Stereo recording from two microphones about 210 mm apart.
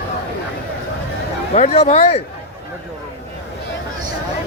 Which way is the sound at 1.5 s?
35° left (ahead or behind).